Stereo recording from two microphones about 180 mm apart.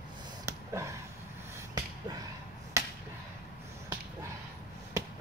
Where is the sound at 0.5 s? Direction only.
15° right (ahead or behind).